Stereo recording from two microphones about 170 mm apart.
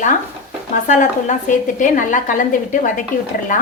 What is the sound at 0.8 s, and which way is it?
A woman's voice, 45° left (ahead or behind).